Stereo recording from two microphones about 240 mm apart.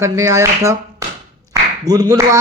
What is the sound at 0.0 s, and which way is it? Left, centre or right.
A man's voice, centre.